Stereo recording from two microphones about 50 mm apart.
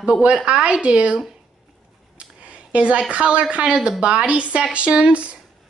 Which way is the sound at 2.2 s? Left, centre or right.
Right.